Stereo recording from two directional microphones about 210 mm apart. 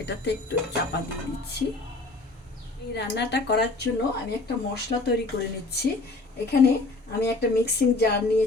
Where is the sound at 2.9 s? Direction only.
55° left (ahead or behind).